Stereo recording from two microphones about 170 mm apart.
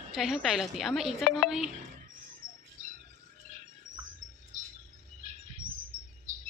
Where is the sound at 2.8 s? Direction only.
50° right (ahead or behind).